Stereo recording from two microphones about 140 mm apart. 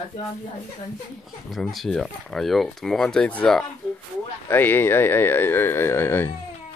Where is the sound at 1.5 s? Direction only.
Centre (ahead or behind).